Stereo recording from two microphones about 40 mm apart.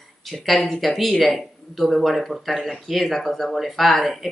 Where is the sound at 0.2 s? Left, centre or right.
Centre.